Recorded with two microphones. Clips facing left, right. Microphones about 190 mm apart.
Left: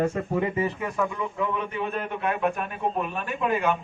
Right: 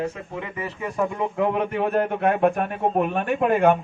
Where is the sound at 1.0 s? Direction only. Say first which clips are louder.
Right 5 dB; 50° right (ahead or behind).